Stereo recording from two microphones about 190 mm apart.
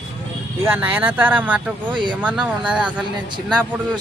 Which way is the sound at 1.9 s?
25° right (ahead or behind).